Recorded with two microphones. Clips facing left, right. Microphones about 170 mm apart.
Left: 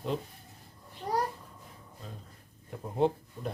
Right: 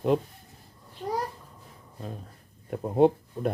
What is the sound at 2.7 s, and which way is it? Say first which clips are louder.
Speech: right 7 dB; 60° right (ahead or behind).